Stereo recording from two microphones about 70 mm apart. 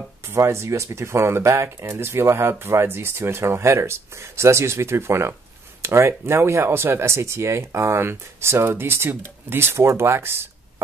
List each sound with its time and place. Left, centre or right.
0.3 s speech: right